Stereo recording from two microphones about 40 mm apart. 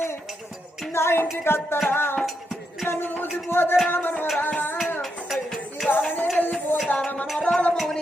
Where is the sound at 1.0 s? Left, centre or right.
Left.